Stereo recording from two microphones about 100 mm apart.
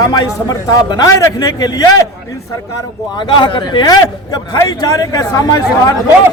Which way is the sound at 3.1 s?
50° left (ahead or behind).